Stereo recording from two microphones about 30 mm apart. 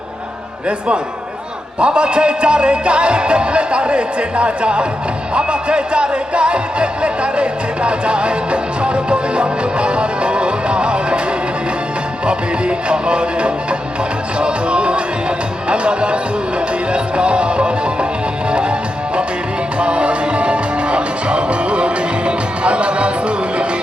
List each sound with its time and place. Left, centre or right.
1.8 s music: right